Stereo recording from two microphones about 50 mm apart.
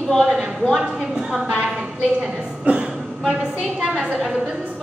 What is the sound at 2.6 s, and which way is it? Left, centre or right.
Speech, right.